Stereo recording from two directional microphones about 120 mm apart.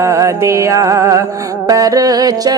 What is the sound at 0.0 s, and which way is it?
Music, 25° right (ahead or behind).